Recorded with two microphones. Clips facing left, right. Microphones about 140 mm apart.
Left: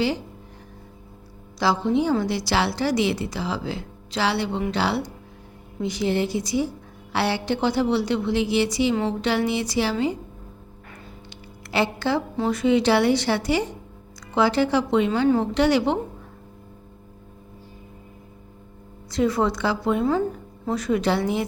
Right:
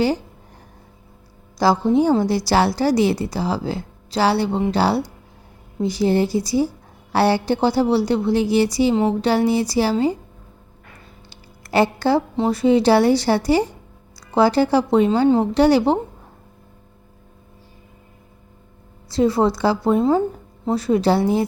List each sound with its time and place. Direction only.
1.5 s a woman's voice: 40° right (ahead or behind)
11.7 s a woman's voice: 40° right (ahead or behind)
19.1 s a woman's voice: 30° right (ahead or behind)